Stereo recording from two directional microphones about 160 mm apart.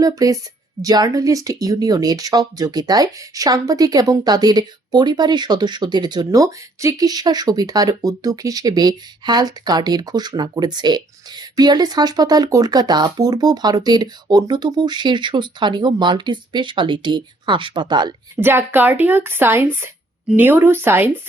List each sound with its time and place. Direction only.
0.0 s speech: 20° right (ahead or behind)
18.3 s speech: 10° right (ahead or behind)